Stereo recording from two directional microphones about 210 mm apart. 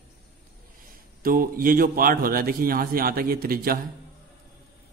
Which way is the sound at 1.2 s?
45° right (ahead or behind).